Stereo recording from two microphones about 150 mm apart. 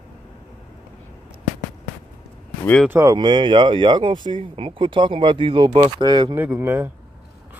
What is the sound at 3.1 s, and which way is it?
Speech, 30° right (ahead or behind).